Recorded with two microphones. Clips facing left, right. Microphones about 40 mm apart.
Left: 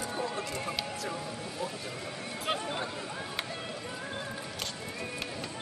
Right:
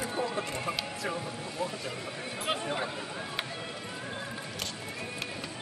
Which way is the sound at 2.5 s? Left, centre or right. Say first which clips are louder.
Right 1 dB; centre.